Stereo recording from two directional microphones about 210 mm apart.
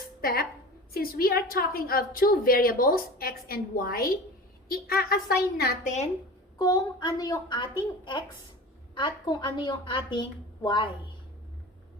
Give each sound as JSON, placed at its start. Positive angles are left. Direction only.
{"t": 0.2, "sound": "a woman's voice", "side_deg": 45}
{"t": 6.6, "sound": "a woman's voice", "side_deg": 20}
{"t": 9.0, "sound": "a woman's voice", "side_deg": 20}